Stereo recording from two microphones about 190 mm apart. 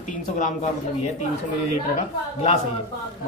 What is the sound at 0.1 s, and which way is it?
Speech, 40° left (ahead or behind).